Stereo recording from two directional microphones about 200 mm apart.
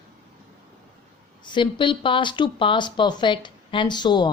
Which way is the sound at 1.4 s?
25° left (ahead or behind).